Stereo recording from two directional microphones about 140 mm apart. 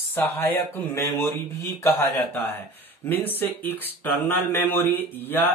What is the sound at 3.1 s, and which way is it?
Speech, 15° left (ahead or behind).